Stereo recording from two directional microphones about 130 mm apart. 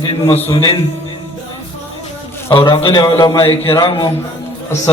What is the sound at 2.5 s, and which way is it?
A man's voice, 40° left (ahead or behind).